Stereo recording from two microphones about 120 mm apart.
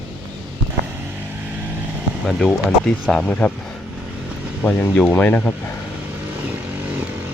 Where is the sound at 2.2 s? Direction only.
Centre (ahead or behind).